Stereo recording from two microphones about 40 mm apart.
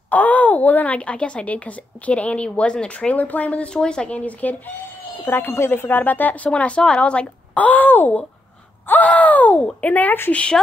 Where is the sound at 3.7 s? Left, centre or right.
Centre.